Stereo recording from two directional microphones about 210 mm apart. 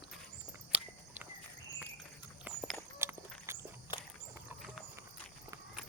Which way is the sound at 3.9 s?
20° left (ahead or behind).